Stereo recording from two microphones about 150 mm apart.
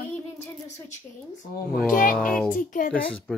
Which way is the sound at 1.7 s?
65° left (ahead or behind).